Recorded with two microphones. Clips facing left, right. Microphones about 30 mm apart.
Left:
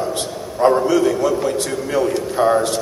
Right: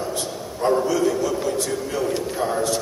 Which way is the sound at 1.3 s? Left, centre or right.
Left.